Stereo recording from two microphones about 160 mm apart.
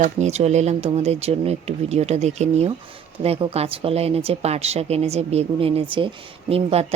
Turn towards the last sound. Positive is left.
turn(degrees=-40)  # may be behind; listen again after turning